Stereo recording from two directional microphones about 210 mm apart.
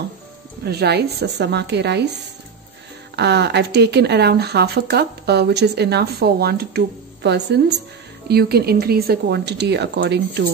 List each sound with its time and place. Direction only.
0.7 s speech: 50° right (ahead or behind)
3.2 s speech: 55° right (ahead or behind)